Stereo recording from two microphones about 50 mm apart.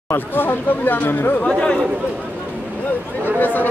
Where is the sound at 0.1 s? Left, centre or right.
Left.